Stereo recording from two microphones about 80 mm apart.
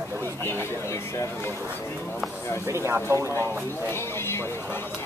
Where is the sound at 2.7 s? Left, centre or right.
Right.